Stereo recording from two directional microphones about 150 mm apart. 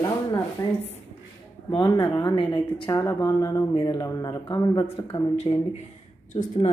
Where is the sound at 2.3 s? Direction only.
35° left (ahead or behind).